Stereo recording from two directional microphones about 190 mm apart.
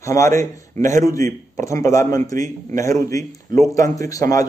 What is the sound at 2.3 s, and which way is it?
Speech, 45° right (ahead or behind).